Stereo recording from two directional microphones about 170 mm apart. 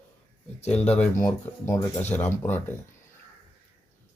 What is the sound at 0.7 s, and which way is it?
Speech, 5° left (ahead or behind).